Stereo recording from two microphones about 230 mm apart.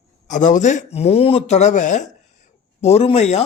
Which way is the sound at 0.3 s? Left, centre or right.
Left.